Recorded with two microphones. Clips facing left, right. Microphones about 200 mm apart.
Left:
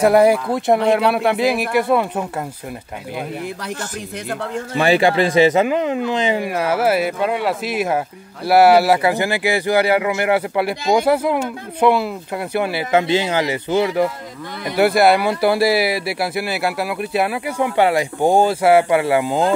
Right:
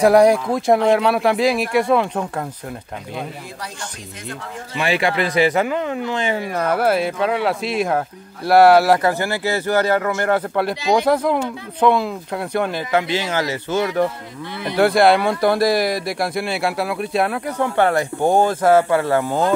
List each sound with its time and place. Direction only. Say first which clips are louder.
0.0 s speech: even; 5° left (ahead or behind)
4.7 s speech: left 5 dB; 35° left (ahead or behind); by 12.8 s 5° left (ahead or behind)
12.9 s speech: left 4 dB; 20° left (ahead or behind)